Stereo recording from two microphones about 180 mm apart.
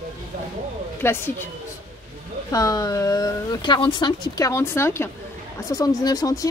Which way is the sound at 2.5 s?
20° left (ahead or behind).